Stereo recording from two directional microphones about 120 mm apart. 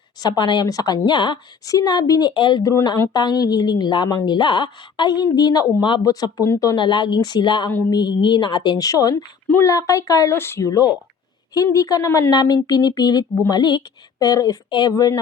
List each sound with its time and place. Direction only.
0.2 s a woman's voice: 35° left (ahead or behind)
6.7 s a woman's voice: 40° left (ahead or behind)